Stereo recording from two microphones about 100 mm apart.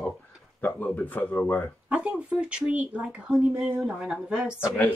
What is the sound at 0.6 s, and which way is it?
Speech, 20° left (ahead or behind).